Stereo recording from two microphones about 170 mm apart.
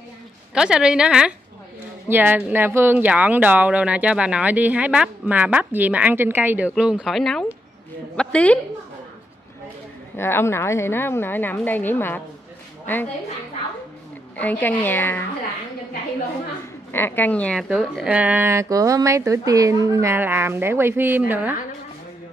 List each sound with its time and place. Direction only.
0.6 s a woman's voice: 5° right (ahead or behind)
10.1 s a woman's voice: 15° left (ahead or behind)
14.4 s a woman's voice: 10° left (ahead or behind)
16.9 s a woman's voice: 10° left (ahead or behind); by 21.5 s 10° right (ahead or behind)